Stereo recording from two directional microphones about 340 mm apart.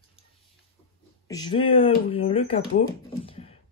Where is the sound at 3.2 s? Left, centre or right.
Centre.